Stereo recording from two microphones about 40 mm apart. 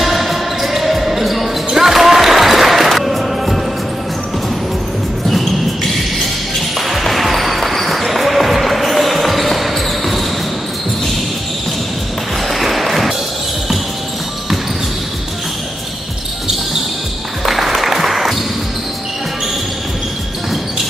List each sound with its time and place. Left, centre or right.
0.0 s basketball bounce: centre
6.9 s basketball bounce: centre
12.4 s basketball bounce: centre
17.5 s applause: centre